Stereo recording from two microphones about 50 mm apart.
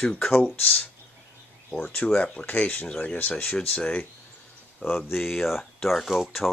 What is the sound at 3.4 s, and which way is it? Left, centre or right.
Speech, left.